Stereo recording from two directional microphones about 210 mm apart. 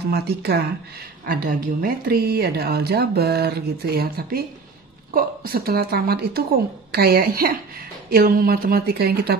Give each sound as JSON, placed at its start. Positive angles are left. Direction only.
{"t": 0.1, "sound": "speech", "side_deg": -50}